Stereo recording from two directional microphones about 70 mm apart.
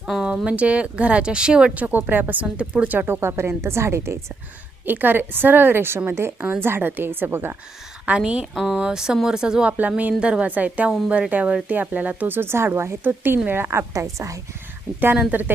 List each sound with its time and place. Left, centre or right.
0.1 s speech: centre
1.7 s speech: right
3.1 s a woman's voice: right
4.9 s a woman's voice: right
8.0 s a woman's voice: centre; by 14.4 s right
15.3 s speech: right